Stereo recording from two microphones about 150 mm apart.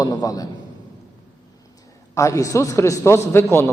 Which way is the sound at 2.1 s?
20° left (ahead or behind).